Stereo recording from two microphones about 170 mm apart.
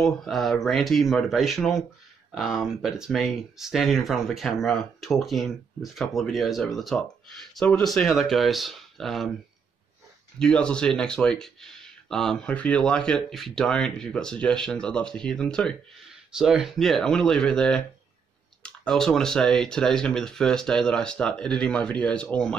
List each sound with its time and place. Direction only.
0.0 s speech: centre (ahead or behind)
10.4 s speech: 5° left (ahead or behind)